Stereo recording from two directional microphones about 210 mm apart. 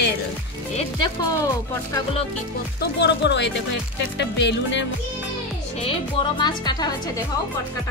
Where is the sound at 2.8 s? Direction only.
55° left (ahead or behind).